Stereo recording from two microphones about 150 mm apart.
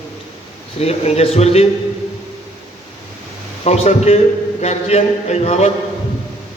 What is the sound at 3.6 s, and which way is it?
A man's voice, 45° left (ahead or behind).